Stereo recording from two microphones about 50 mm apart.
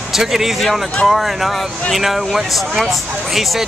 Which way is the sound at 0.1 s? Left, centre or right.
Centre.